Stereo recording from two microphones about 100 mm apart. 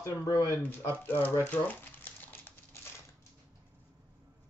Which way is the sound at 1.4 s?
20° left (ahead or behind).